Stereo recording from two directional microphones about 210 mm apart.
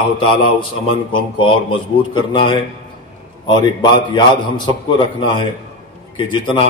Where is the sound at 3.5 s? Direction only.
20° left (ahead or behind).